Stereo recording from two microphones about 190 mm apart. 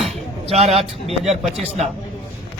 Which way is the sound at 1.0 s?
Centre (ahead or behind).